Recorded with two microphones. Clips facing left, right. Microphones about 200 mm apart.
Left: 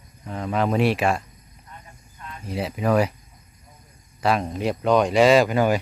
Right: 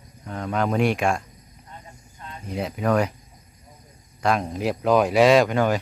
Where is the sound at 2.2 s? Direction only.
30° right (ahead or behind).